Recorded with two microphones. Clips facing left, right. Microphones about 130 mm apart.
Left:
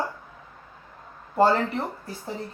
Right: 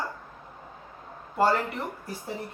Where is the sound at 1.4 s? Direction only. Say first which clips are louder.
Left 4 dB; 30° left (ahead or behind).